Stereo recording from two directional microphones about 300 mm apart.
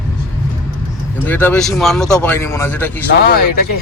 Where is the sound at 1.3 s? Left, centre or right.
Centre.